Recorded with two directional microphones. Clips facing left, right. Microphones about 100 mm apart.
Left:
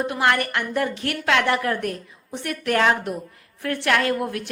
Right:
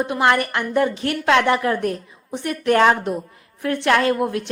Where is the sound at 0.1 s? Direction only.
25° right (ahead or behind).